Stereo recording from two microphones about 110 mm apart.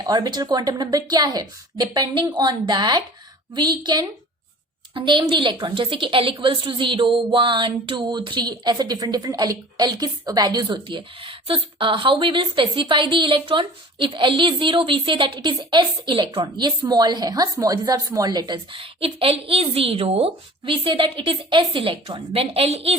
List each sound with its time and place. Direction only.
0.0 s a woman's voice: 40° right (ahead or behind); by 23.0 s 65° right (ahead or behind)